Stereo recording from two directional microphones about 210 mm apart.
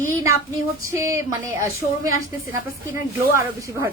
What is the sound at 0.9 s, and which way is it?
A woman's voice, 15° right (ahead or behind).